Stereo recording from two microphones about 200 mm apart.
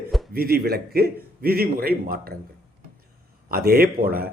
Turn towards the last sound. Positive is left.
turn(degrees=-50)  # may be behind; listen again after turning